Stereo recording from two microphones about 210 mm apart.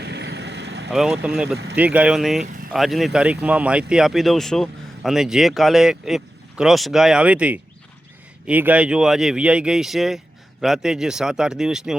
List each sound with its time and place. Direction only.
0.0 s vehicle: 55° right (ahead or behind)
0.9 s speech: 5° right (ahead or behind)